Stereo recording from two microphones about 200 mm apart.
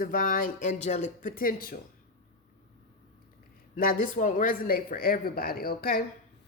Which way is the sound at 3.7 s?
45° left (ahead or behind).